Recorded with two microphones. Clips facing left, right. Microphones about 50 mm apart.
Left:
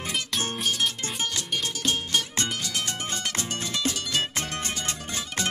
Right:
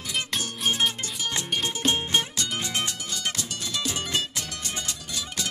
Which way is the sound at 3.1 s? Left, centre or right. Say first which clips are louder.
Left 1 dB; left.